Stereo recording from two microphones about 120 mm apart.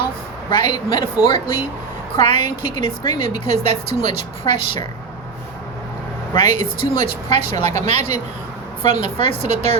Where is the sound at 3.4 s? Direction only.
70° right (ahead or behind).